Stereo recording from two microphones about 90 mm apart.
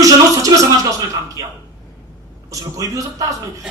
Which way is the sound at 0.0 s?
40° right (ahead or behind).